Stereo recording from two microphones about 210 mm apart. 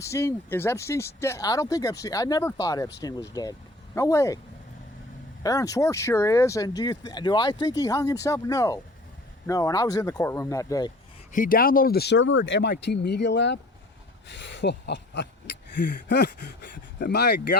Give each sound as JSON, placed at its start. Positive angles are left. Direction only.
{"t": 0.0, "sound": "speech", "side_deg": 15}
{"t": 5.4, "sound": "speech", "side_deg": 15}
{"t": 11.3, "sound": "speech", "side_deg": 40}